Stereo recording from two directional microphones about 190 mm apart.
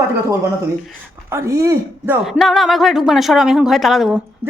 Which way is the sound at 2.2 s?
Centre (ahead or behind).